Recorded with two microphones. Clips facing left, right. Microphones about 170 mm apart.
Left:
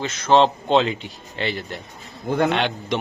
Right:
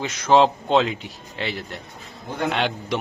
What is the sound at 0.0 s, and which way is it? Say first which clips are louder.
A man's voice: even; 10° right (ahead or behind).